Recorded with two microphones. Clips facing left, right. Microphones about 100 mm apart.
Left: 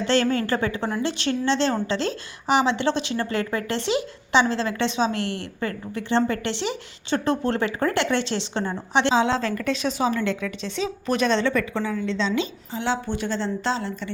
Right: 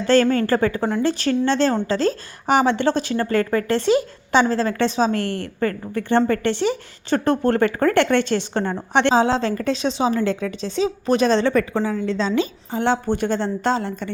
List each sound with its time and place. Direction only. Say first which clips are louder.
0.0 s a woman's voice: right 5 dB; 40° right (ahead or behind)
9.2 s a woman's voice: right 3 dB; 35° right (ahead or behind); by 14.1 s 50° right (ahead or behind)